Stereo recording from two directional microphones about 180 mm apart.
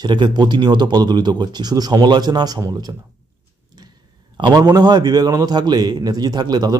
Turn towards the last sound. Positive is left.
turn(degrees=-25)  # may be behind; listen again after turning